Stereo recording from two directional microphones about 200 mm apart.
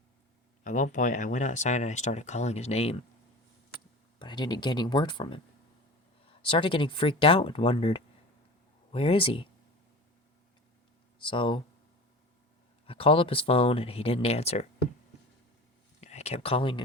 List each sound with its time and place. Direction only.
0.6 s speech: 40° left (ahead or behind)
4.2 s speech: 20° left (ahead or behind)
11.2 s speech: 25° left (ahead or behind)
12.8 s speech: 25° left (ahead or behind)
16.0 s speech: 35° left (ahead or behind)